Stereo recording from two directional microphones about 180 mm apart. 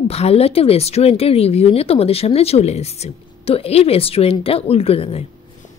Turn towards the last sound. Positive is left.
turn(degrees=35)  # may be behind; listen again after turning